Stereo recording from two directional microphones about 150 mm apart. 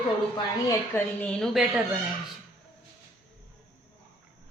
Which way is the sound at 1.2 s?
5° left (ahead or behind).